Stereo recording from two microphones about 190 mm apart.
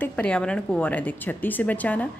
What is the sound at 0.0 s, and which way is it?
A woman's voice, 5° left (ahead or behind).